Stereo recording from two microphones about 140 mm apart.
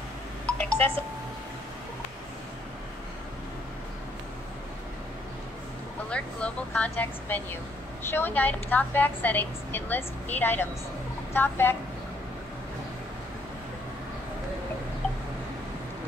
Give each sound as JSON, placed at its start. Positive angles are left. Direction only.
{"t": 0.5, "sound": "wind chime", "side_deg": 10}
{"t": 6.0, "sound": "a woman's voice", "side_deg": 10}